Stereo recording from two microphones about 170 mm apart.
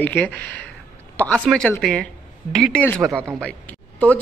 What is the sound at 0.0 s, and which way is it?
A woman's voice, 10° left (ahead or behind).